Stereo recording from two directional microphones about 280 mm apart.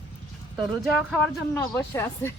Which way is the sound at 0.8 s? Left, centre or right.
Centre.